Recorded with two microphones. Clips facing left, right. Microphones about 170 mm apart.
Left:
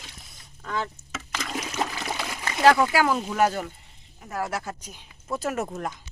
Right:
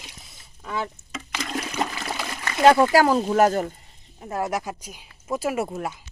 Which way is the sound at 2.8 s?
40° right (ahead or behind).